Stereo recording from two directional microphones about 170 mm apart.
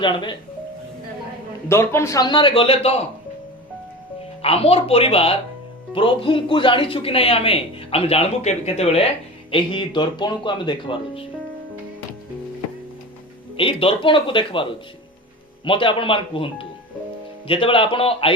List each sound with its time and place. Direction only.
0.0 s speech: 30° left (ahead or behind)
1.6 s speech: 15° left (ahead or behind); by 3.1 s 35° left (ahead or behind)
4.4 s speech: 35° left (ahead or behind)
13.6 s speech: 30° left (ahead or behind)